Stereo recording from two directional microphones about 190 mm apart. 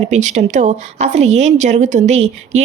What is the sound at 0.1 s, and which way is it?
A woman's voice, 40° right (ahead or behind).